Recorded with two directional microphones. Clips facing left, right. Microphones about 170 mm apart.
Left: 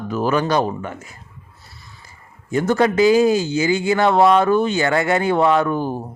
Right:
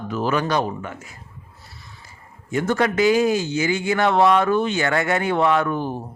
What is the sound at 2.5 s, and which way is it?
Speech, 35° left (ahead or behind).